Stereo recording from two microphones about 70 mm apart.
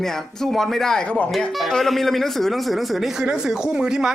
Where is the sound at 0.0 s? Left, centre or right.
Centre.